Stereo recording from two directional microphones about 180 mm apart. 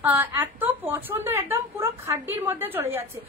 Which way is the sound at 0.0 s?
10° right (ahead or behind).